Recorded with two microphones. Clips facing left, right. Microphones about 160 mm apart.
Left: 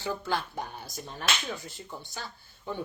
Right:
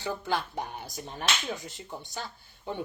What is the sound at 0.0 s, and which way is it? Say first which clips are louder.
Speech: even; 20° right (ahead or behind).